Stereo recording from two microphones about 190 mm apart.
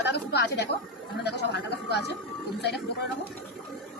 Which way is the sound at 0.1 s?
60° left (ahead or behind).